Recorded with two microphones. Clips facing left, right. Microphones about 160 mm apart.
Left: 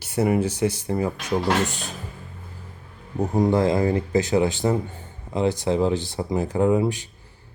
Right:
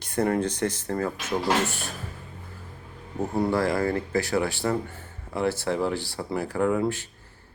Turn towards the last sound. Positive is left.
turn(degrees=15)  # may be behind; listen again after turning